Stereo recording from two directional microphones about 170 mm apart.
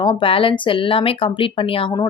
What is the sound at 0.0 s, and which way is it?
Speech, 30° left (ahead or behind).